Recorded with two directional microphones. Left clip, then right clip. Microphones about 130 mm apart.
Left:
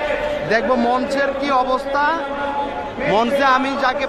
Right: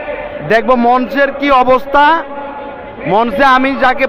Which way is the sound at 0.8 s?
25° right (ahead or behind).